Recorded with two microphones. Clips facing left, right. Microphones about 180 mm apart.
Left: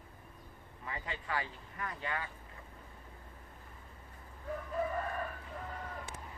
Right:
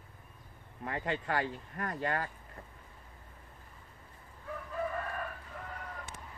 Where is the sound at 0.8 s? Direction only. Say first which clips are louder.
Right 8 dB; 55° right (ahead or behind).